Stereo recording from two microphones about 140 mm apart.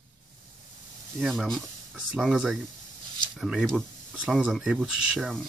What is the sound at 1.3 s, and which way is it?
Speech, centre (ahead or behind).